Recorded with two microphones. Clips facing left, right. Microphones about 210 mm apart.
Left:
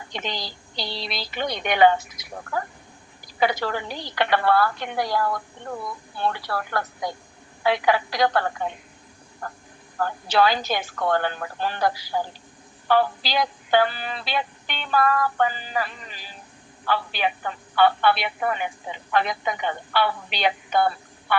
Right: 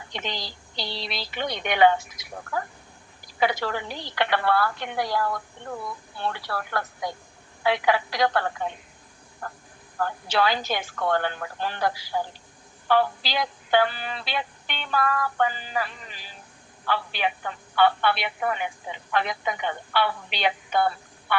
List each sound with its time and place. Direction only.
0.1 s music: 40° left (ahead or behind)
3.4 s music: 40° left (ahead or behind)
6.2 s music: 40° left (ahead or behind)
10.0 s music: 40° left (ahead or behind)